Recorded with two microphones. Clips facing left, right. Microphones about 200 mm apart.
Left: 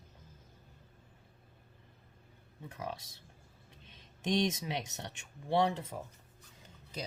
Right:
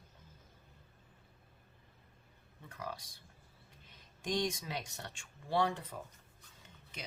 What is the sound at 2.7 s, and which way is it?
Speech, 25° left (ahead or behind).